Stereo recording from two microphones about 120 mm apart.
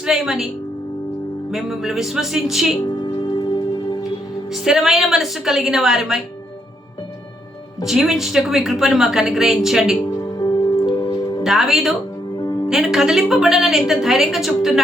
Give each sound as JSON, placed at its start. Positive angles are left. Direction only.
{"t": 0.0, "sound": "a woman's voice", "side_deg": -5}
{"t": 1.5, "sound": "a woman's voice", "side_deg": -5}
{"t": 4.6, "sound": "a woman's voice", "side_deg": -5}
{"t": 7.9, "sound": "a woman's voice", "side_deg": 0}
{"t": 10.3, "sound": "music", "side_deg": 35}
{"t": 11.4, "sound": "a woman's voice", "side_deg": -5}